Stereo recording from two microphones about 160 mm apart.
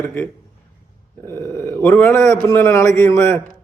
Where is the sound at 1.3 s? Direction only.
15° left (ahead or behind).